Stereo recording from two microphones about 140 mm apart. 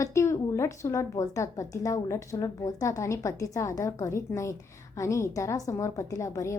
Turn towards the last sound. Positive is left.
turn(degrees=20)  # may be behind; listen again after turning